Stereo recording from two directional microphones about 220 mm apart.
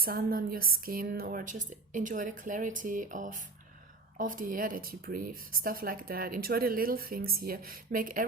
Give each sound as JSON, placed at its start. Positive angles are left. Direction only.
{"t": 0.0, "sound": "speech", "side_deg": -40}